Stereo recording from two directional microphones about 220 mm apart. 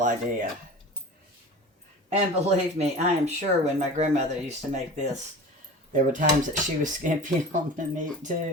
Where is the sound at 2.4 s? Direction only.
30° right (ahead or behind).